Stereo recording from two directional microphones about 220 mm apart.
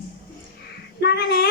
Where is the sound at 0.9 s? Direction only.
45° left (ahead or behind).